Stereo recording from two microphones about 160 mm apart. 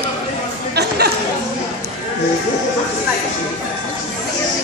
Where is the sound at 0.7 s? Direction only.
90° right.